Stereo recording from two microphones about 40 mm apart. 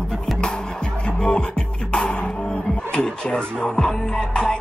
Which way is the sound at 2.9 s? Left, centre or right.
Centre.